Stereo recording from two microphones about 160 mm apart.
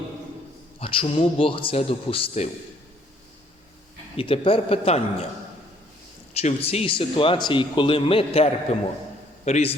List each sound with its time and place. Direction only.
0.8 s speech: 35° left (ahead or behind)
4.2 s speech: 35° left (ahead or behind)
6.3 s a man's voice: 40° left (ahead or behind)